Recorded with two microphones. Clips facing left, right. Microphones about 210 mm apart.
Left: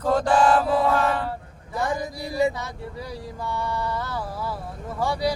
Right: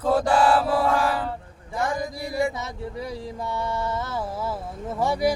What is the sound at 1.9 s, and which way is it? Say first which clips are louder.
Mantra: even; 20° left (ahead or behind).